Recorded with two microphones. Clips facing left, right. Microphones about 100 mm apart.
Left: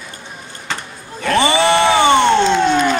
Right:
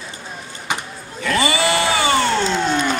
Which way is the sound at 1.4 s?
25° left (ahead or behind).